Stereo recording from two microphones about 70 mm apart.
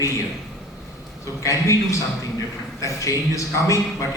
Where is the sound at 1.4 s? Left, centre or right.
Left.